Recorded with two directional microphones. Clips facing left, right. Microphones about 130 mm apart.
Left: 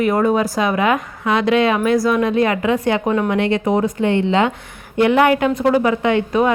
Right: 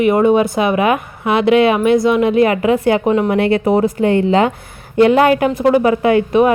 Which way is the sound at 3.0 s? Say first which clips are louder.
Right 4 dB; 15° right (ahead or behind).